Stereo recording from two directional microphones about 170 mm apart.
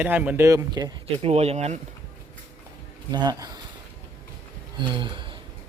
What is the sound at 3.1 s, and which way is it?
Speech, 25° right (ahead or behind).